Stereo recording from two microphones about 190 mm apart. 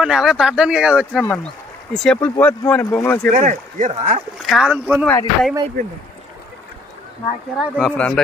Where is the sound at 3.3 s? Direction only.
40° right (ahead or behind).